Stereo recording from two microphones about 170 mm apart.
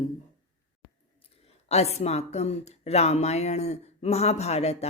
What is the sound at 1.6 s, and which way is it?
Speech, 40° left (ahead or behind).